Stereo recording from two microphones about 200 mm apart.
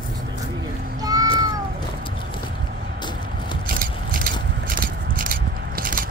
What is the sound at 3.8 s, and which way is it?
Biting, 45° right (ahead or behind).